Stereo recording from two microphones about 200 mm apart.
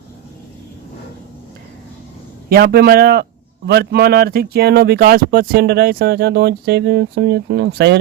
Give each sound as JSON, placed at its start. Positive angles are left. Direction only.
{"t": 2.5, "sound": "speech", "side_deg": -50}